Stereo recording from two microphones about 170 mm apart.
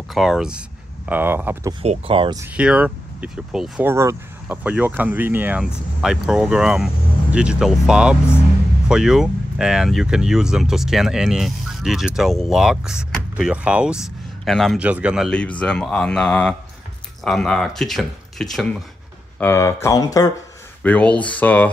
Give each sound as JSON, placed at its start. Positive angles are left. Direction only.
{"t": 0.1, "sound": "speech", "side_deg": 0}
{"t": 1.7, "sound": "speech", "side_deg": -35}
{"t": 2.5, "sound": "speech", "side_deg": -5}
{"t": 3.9, "sound": "speech", "side_deg": -15}
{"t": 19.4, "sound": "speech", "side_deg": 15}
{"t": 20.8, "sound": "speech", "side_deg": 10}